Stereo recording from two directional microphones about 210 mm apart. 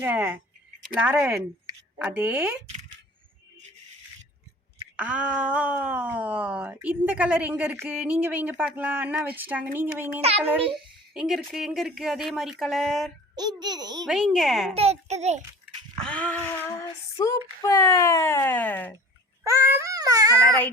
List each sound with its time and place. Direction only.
0.0 s speech: 10° right (ahead or behind)
4.9 s speech: 5° right (ahead or behind)
11.1 s speech: centre (ahead or behind)
13.3 s a child's voice: 20° right (ahead or behind)
14.1 s speech: centre (ahead or behind)
14.7 s a child's voice: 30° right (ahead or behind)
16.0 s a sound: 5° left (ahead or behind)
17.2 s speech: 15° left (ahead or behind)
19.5 s a sound: 10° right (ahead or behind)